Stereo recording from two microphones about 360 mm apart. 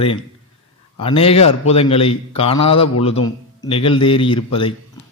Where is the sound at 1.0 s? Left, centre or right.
Centre.